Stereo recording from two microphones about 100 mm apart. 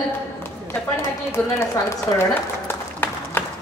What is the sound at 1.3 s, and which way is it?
Speech, 25° left (ahead or behind).